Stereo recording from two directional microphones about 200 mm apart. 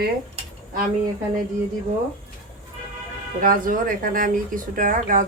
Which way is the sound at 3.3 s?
45° right (ahead or behind).